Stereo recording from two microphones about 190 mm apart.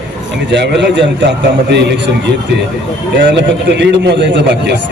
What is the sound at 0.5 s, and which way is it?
A man's voice, 65° right (ahead or behind).